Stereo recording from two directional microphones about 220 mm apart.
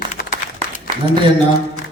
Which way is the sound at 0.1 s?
35° left (ahead or behind).